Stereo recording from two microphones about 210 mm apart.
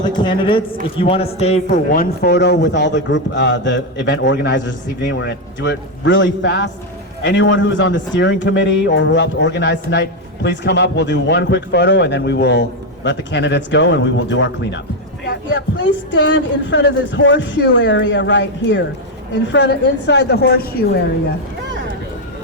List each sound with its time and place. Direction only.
0.0 s a man's voice: 20° left (ahead or behind)
1.9 s a man's voice: 45° left (ahead or behind)